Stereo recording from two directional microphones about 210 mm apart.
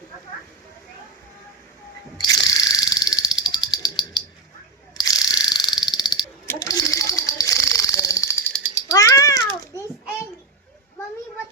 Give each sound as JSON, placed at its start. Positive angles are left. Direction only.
{"t": 2.2, "sound": "ratchet", "side_deg": 20}
{"t": 4.9, "sound": "mechanisms", "side_deg": 20}
{"t": 6.5, "sound": "a sound", "side_deg": 15}
{"t": 8.9, "sound": "cat", "side_deg": 15}